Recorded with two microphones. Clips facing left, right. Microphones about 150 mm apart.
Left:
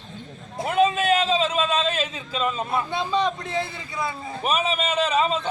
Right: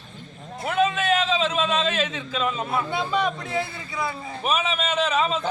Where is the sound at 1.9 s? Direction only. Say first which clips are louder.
Right 1 dB; 35° left (ahead or behind).